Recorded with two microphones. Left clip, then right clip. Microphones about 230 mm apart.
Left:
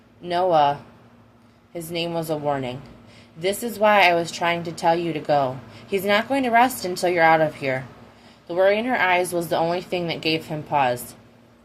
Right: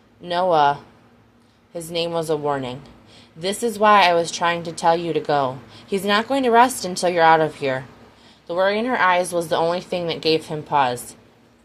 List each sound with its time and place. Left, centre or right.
0.3 s a woman's voice: right